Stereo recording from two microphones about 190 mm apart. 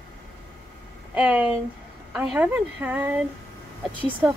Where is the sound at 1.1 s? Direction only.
10° right (ahead or behind).